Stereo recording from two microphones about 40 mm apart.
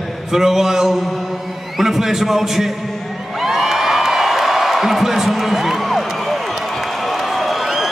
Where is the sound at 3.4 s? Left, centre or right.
Centre.